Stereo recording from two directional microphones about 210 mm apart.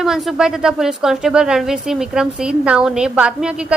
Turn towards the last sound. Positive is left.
turn(degrees=-5)  # may be behind; listen again after turning